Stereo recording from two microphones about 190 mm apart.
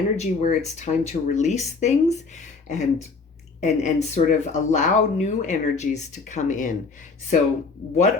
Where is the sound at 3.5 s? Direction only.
35° left (ahead or behind).